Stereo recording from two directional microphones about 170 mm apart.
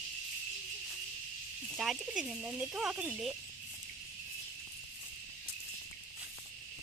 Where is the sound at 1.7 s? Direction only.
Centre (ahead or behind).